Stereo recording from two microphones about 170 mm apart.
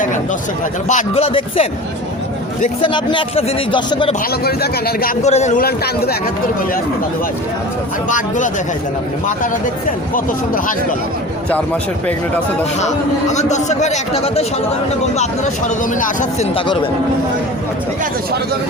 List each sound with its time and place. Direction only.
0.9 s a man's voice: 40° left (ahead or behind)
2.8 s speech: 30° left (ahead or behind)
4.4 s speech: 65° left (ahead or behind)
5.2 s a man's voice: 40° left (ahead or behind)
5.5 s speech: 65° left (ahead or behind)
10.2 s speech: 55° left (ahead or behind)
11.5 s a man's voice: 10° left (ahead or behind)
12.8 s a man's voice: 40° left (ahead or behind)
16.6 s a man's voice: 30° left (ahead or behind)